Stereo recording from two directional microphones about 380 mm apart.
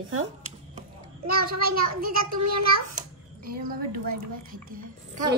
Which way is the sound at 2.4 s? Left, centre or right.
Right.